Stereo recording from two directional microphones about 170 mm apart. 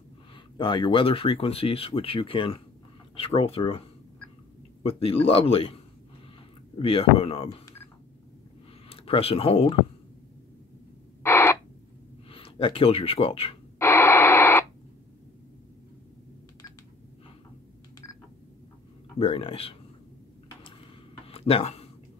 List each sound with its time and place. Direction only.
0.6 s speech: 30° left (ahead or behind)
4.8 s speech: 35° left (ahead or behind)
6.8 s speech: 35° left (ahead or behind)
8.8 s speech: 35° left (ahead or behind)
11.2 s radio: 15° left (ahead or behind)
12.3 s speech: 35° left (ahead or behind)
13.7 s radio: 15° left (ahead or behind)
19.1 s speech: 30° left (ahead or behind)
21.3 s a sound: 35° left (ahead or behind)